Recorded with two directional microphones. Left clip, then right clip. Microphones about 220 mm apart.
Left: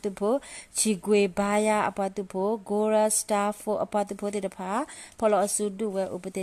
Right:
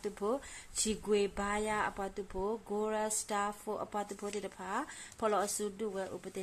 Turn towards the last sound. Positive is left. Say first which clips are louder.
# left 10 dB
turn(degrees=35)  # may be behind; listen again after turning